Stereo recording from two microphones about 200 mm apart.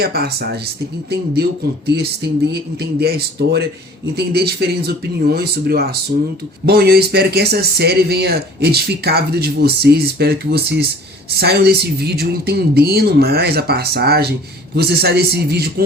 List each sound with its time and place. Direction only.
0.0 s speech: 50° right (ahead or behind)